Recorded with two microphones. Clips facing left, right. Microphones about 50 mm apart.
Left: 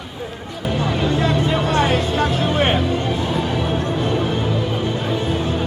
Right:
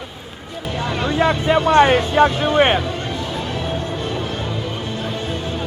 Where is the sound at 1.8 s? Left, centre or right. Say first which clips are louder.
Right 5 dB; right.